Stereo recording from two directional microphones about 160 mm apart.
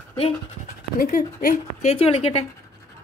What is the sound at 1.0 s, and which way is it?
Speech, 60° left (ahead or behind).